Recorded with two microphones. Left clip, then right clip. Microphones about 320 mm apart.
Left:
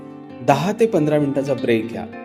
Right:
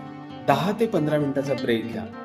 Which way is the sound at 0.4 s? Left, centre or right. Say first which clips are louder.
Left 5 dB; centre.